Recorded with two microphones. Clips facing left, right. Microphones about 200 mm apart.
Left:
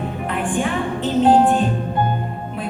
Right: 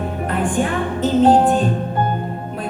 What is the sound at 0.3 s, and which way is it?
Music, 40° right (ahead or behind).